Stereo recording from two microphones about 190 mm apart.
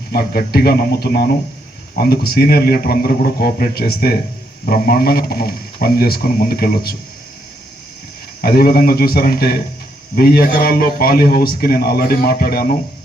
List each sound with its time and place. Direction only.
0.1 s a man's voice: 55° left (ahead or behind)
8.4 s speech: 50° left (ahead or behind)